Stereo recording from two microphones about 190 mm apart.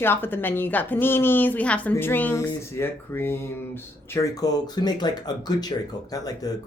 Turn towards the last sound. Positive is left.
turn(degrees=20)  # may be behind; listen again after turning